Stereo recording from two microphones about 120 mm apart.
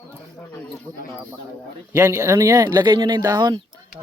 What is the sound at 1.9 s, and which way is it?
Speech, 25° right (ahead or behind).